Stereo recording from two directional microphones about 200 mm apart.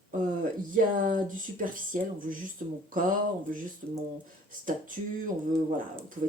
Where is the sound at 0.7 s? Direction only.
40° right (ahead or behind).